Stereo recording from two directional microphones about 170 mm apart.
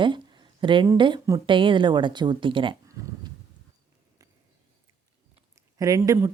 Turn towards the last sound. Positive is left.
turn(degrees=-20)  # may be behind; listen again after turning